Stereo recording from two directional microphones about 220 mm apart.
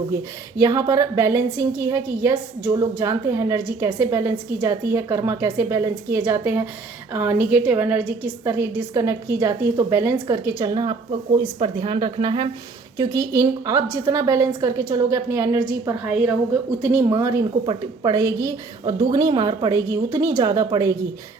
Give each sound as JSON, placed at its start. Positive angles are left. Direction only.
{"t": 0.1, "sound": "a woman's voice", "side_deg": -15}